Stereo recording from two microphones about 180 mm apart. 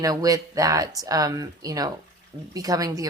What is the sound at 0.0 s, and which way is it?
A woman's voice, 20° right (ahead or behind).